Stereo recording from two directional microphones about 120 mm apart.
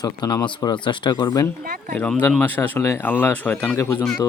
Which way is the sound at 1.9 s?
10° left (ahead or behind).